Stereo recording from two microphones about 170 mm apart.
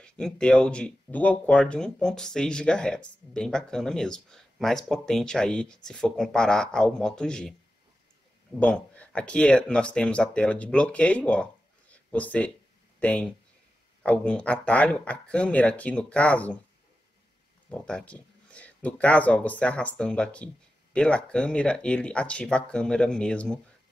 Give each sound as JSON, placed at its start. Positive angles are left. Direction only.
{"t": 0.0, "sound": "speech", "side_deg": 5}
{"t": 8.5, "sound": "speech", "side_deg": 10}
{"t": 17.6, "sound": "speech", "side_deg": 5}